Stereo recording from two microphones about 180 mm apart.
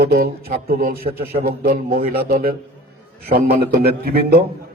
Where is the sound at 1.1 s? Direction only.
30° right (ahead or behind).